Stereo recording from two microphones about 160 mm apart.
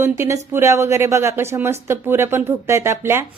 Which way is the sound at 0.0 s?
15° right (ahead or behind).